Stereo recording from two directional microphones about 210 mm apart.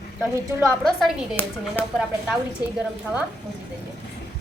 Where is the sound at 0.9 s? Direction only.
Centre (ahead or behind).